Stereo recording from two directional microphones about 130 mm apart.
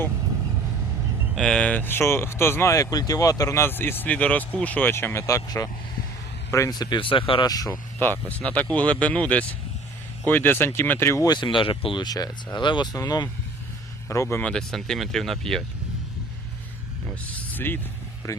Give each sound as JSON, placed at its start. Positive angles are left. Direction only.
{"t": 1.4, "sound": "speech", "side_deg": 5}
{"t": 8.3, "sound": "speech", "side_deg": 10}
{"t": 11.3, "sound": "speech", "side_deg": 35}
{"t": 17.1, "sound": "a sound", "side_deg": 15}